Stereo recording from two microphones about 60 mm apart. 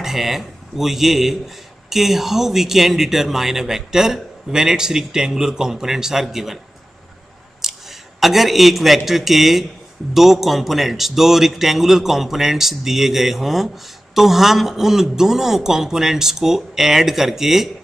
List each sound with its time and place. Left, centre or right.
0.0 s speech: centre
7.6 s a man's voice: centre